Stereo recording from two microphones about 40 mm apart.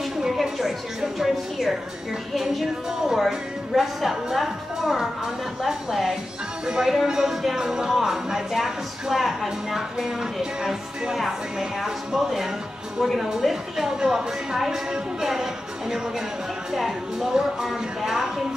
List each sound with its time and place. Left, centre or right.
0.2 s a sound: centre
1.1 s a woman's voice: centre
6.6 s a woman's voice: centre
17.3 s a woman's voice: centre